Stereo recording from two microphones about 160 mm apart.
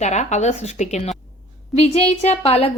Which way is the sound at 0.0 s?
45° left (ahead or behind).